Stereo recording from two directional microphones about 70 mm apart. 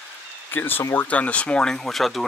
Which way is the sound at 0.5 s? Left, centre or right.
Left.